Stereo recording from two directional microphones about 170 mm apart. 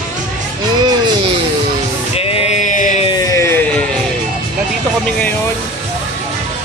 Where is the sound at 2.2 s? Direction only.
35° left (ahead or behind).